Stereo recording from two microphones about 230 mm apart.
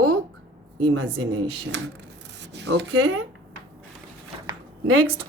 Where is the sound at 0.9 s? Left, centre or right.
Right.